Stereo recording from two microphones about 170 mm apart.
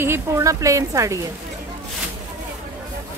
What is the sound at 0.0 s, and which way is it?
Speech, 15° right (ahead or behind).